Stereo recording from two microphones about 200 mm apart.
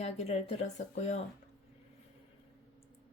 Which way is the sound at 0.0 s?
35° left (ahead or behind).